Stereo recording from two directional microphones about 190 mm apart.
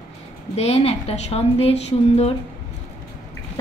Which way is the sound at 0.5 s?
35° left (ahead or behind).